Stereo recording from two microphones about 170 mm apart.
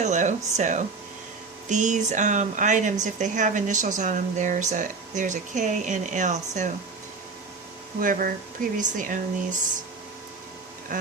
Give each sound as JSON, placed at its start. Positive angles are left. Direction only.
{"t": 0.0, "sound": "speech", "side_deg": -45}
{"t": 7.9, "sound": "speech", "side_deg": -55}